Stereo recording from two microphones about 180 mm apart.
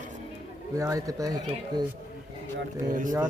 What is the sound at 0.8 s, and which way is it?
Speech, 20° right (ahead or behind).